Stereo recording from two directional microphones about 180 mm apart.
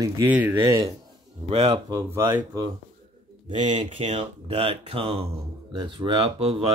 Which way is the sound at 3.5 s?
40° right (ahead or behind).